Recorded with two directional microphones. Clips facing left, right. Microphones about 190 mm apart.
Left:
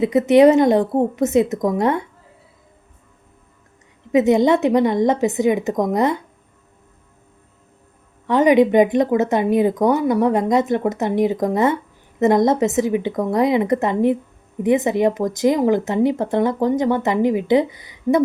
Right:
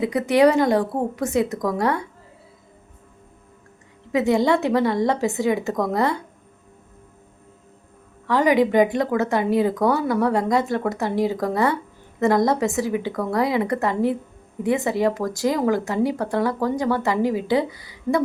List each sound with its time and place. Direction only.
0.0 s speech: 20° left (ahead or behind)
4.1 s speech: 20° left (ahead or behind)
8.3 s speech: 20° left (ahead or behind)